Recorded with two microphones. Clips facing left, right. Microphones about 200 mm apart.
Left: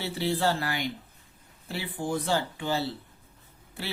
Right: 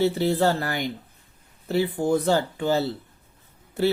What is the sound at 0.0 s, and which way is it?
Speech, 45° right (ahead or behind).